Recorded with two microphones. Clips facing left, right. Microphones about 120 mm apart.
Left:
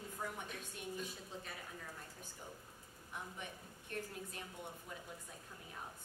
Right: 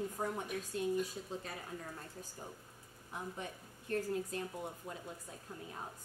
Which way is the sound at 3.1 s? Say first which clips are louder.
Right 5 dB; 35° right (ahead or behind).